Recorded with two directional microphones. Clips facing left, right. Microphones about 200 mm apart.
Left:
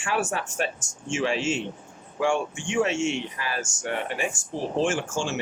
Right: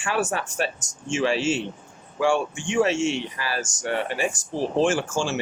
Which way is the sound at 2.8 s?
35° right (ahead or behind).